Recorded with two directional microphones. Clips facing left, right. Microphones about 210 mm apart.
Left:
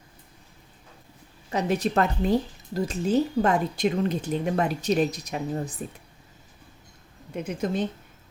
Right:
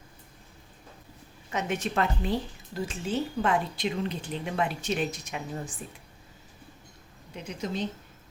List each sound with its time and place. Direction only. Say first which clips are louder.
1.5 s speech: left 5 dB; 35° left (ahead or behind)
7.3 s a woman's voice: left 6 dB; 50° left (ahead or behind)